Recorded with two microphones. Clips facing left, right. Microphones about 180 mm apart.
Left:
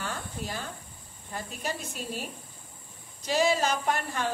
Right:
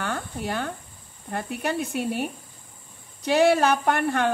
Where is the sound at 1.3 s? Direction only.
60° right (ahead or behind).